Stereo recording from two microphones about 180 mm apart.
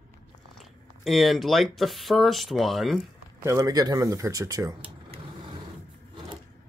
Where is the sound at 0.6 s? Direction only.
Centre (ahead or behind).